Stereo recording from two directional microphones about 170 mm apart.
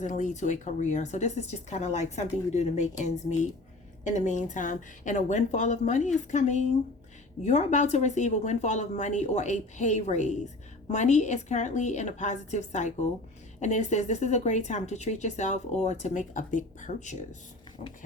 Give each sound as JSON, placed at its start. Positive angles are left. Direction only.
{"t": 0.0, "sound": "speech", "side_deg": 45}